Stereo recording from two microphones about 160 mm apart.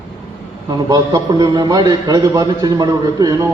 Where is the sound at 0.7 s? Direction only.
25° right (ahead or behind).